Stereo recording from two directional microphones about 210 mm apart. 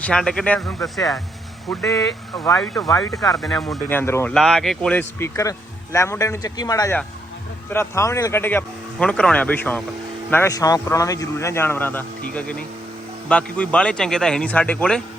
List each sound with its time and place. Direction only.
0.0 s a man's voice: 5° left (ahead or behind)
3.0 s speech: 15° left (ahead or behind)
3.4 s speech: centre (ahead or behind)
4.4 s a man's voice: centre (ahead or behind)